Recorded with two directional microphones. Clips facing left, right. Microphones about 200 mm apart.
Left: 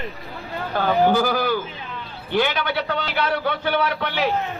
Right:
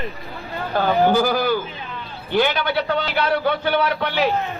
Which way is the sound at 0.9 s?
35° right (ahead or behind).